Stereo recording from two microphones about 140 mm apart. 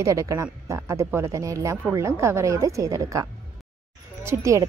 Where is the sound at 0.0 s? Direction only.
25° right (ahead or behind).